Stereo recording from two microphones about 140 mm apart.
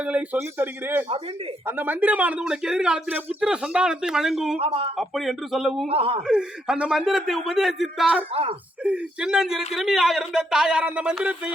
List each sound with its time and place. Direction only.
0.0 s speech: 10° right (ahead or behind)
4.6 s a man's voice: 45° right (ahead or behind)
4.9 s speech: centre (ahead or behind)
5.9 s a man's voice: 45° right (ahead or behind)
6.2 s speech: 5° right (ahead or behind)
8.3 s a man's voice: 40° right (ahead or behind)
8.8 s speech: 5° right (ahead or behind)